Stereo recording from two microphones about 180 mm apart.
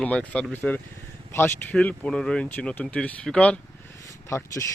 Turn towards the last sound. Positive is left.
turn(degrees=15)  # may be behind; listen again after turning